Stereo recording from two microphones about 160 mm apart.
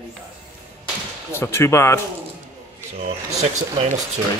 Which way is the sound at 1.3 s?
15° left (ahead or behind).